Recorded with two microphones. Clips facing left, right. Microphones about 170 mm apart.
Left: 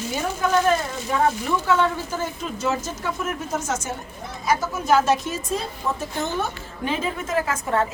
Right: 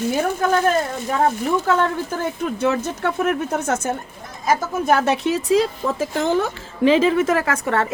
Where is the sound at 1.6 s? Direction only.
55° right (ahead or behind).